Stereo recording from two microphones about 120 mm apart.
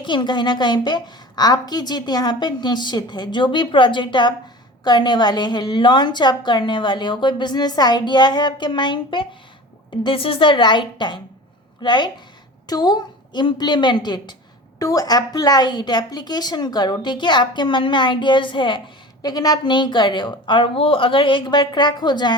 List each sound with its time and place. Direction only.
0.0 s a woman's voice: 40° left (ahead or behind)